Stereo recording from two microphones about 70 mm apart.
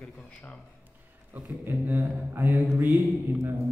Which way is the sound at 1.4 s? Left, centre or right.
Right.